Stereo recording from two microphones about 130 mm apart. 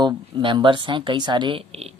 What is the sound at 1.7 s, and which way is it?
Speech, 50° right (ahead or behind).